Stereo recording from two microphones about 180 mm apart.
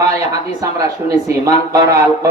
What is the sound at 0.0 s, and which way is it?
Speech, 15° right (ahead or behind).